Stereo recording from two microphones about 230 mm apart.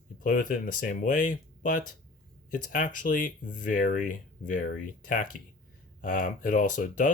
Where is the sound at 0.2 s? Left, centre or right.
Left.